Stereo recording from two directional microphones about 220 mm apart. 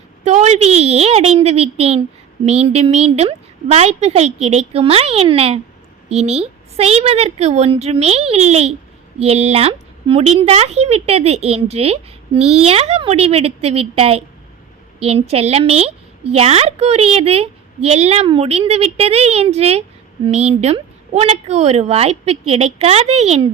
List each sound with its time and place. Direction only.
0.3 s a woman's voice: 30° right (ahead or behind)